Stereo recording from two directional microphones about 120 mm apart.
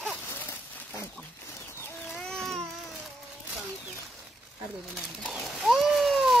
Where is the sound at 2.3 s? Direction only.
Centre (ahead or behind).